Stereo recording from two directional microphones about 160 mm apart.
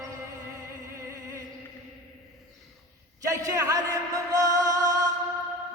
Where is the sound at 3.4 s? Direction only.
20° right (ahead or behind).